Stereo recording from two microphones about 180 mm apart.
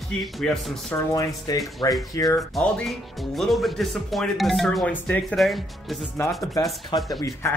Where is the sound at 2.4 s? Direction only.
Centre (ahead or behind).